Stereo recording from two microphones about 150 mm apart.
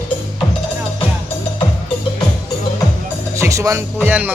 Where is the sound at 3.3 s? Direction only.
20° right (ahead or behind).